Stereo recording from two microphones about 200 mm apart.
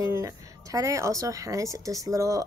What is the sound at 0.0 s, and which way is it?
A woman's voice, 15° right (ahead or behind).